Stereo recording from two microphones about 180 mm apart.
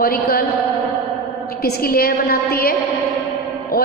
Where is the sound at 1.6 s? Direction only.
55° left (ahead or behind).